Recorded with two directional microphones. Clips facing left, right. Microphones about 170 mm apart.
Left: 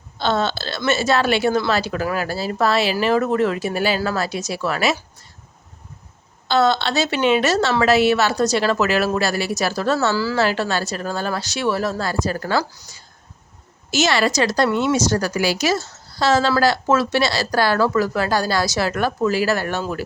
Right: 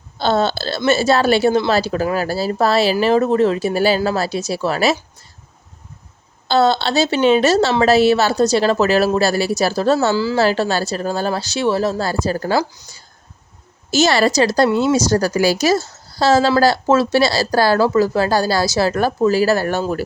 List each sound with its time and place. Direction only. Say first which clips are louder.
0.2 s hiccup: right 4 dB; 35° right (ahead or behind)
0.9 s speech: right 4 dB; 35° right (ahead or behind)
6.5 s speech: right 3 dB; 30° right (ahead or behind)
13.9 s speech: right 4 dB; 35° right (ahead or behind)